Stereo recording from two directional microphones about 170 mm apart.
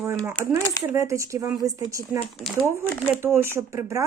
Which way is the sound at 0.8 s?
15° right (ahead or behind).